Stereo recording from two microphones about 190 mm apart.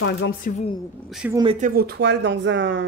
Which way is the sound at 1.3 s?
25° right (ahead or behind).